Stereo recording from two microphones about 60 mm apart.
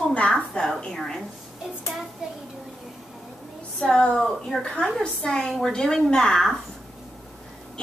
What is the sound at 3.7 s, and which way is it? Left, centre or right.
A woman's voice, centre.